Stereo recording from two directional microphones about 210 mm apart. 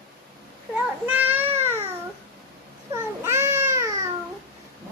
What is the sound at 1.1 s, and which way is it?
Babbling, 10° right (ahead or behind).